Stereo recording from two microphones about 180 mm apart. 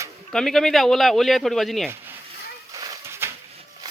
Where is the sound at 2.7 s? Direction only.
20° right (ahead or behind).